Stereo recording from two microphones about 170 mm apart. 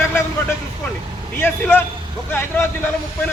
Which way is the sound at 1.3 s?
15° left (ahead or behind).